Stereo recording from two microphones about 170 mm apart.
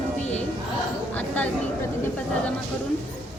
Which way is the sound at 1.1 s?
10° left (ahead or behind).